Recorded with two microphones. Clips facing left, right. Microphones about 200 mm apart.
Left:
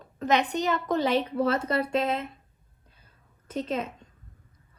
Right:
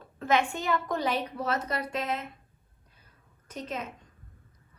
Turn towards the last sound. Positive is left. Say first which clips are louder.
# left 6 dB
turn(degrees=25)  # may be behind; listen again after turning